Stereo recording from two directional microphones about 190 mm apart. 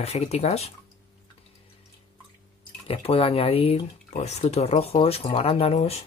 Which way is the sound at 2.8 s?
30° left (ahead or behind).